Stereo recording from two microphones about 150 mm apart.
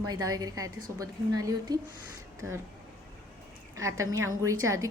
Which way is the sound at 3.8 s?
20° right (ahead or behind).